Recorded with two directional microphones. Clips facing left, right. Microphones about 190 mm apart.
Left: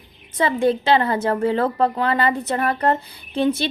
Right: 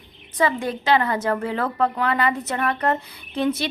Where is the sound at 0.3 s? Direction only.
30° left (ahead or behind).